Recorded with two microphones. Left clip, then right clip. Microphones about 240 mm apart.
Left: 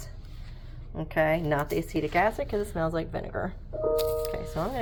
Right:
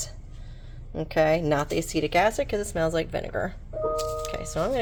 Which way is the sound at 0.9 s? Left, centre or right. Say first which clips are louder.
Right 3 dB; right.